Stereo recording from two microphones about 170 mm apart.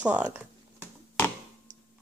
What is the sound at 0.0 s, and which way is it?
Computer keyboard, 10° right (ahead or behind).